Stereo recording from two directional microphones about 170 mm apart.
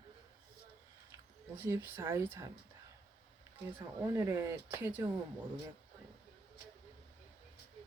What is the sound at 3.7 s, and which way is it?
Speech, 15° right (ahead or behind).